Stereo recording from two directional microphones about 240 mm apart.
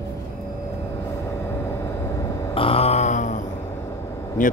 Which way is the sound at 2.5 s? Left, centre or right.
Left.